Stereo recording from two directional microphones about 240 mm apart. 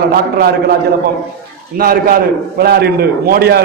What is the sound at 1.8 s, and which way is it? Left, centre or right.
A man's voice, right.